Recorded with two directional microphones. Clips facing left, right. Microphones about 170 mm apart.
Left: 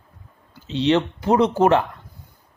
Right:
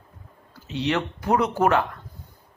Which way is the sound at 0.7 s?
25° left (ahead or behind).